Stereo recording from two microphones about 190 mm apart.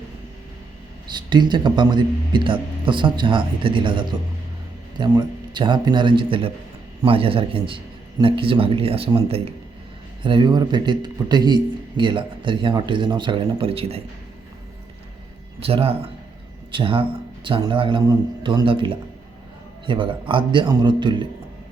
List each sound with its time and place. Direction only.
1.1 s a man's voice: 25° right (ahead or behind)
15.6 s a man's voice: 30° right (ahead or behind)